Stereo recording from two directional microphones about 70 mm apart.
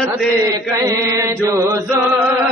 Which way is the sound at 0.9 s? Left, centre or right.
Right.